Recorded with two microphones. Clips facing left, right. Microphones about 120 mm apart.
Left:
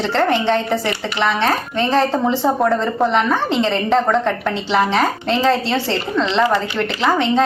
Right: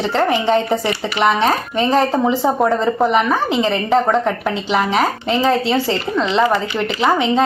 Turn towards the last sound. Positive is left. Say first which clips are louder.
# right 1 dB
turn(degrees=-15)  # may be behind; listen again after turning